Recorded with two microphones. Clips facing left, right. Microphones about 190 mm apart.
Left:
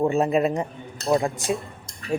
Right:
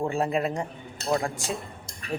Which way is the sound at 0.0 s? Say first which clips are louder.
Left 6 dB; 20° left (ahead or behind).